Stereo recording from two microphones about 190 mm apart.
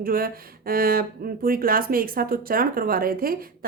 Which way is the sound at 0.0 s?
50° right (ahead or behind).